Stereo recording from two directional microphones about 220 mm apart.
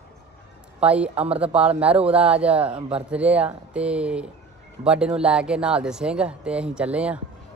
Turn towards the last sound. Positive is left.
turn(degrees=-5)  # may be behind; listen again after turning